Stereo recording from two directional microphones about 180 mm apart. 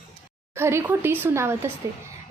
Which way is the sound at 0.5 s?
15° right (ahead or behind).